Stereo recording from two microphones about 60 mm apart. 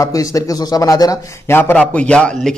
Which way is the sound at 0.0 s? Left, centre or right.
Left.